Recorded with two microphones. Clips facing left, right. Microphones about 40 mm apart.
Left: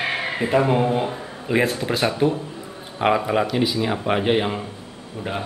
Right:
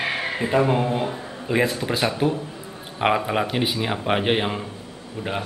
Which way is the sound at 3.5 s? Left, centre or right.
Right.